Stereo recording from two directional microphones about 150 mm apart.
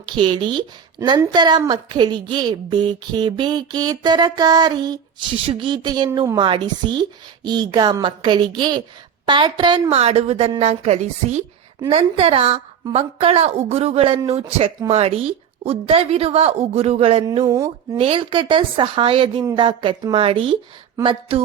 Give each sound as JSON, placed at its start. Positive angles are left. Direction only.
{"t": 0.1, "sound": "a woman's voice", "side_deg": -35}
{"t": 9.9, "sound": "a woman's voice", "side_deg": -45}
{"t": 17.4, "sound": "a woman's voice", "side_deg": -20}
{"t": 17.9, "sound": "a woman's voice", "side_deg": -40}